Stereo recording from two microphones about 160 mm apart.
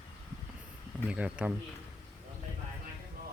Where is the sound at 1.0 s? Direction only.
5° right (ahead or behind).